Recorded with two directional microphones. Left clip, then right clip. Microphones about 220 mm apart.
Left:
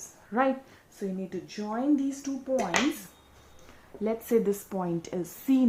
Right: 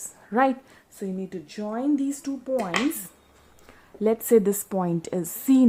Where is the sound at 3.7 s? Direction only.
45° right (ahead or behind).